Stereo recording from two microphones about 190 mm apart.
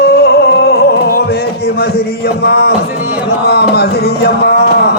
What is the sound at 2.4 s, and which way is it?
Music, 60° left (ahead or behind).